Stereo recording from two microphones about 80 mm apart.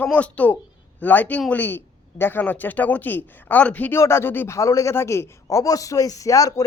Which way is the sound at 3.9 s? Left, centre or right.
Left.